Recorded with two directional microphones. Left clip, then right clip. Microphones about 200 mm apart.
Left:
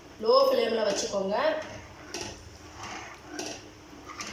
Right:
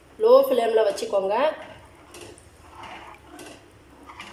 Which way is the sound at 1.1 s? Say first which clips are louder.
Right 7 dB; 50° right (ahead or behind).